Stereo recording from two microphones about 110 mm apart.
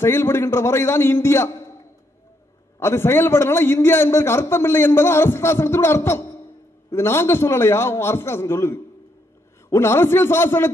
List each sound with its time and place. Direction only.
0.0 s a man's voice: 20° left (ahead or behind)
2.8 s a man's voice: 20° left (ahead or behind)